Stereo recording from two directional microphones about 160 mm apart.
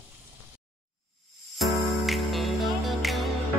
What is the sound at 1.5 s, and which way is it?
Music, centre (ahead or behind).